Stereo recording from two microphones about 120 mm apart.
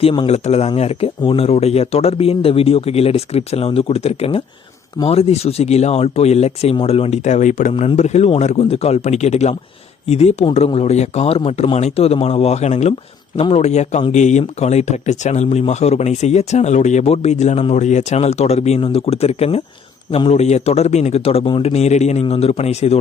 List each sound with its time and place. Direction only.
0.0 s speech: 40° left (ahead or behind)
0.3 s speech: 65° left (ahead or behind); by 7.7 s 85° left
7.9 s speech: 70° left (ahead or behind); by 21.7 s 50° left (ahead or behind)
21.7 s speech: 65° left (ahead or behind)